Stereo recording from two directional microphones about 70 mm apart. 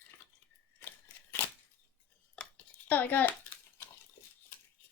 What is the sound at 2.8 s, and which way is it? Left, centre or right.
Speech, left.